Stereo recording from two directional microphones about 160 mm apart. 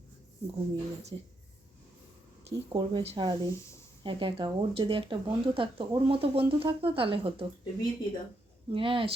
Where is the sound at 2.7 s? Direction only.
30° right (ahead or behind).